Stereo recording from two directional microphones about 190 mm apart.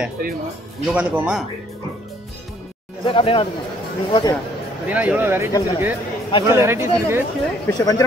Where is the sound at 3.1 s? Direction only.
25° left (ahead or behind).